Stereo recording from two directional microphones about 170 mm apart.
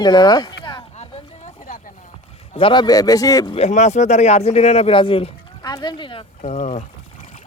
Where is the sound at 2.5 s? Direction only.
30° left (ahead or behind).